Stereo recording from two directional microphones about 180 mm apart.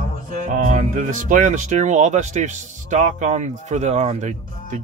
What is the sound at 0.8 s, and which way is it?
Speech, 45° right (ahead or behind).